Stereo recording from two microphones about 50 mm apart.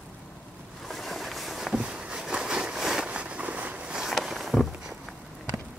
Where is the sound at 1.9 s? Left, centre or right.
Centre.